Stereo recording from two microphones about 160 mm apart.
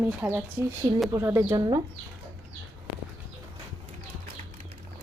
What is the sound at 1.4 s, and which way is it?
Speech, 25° right (ahead or behind).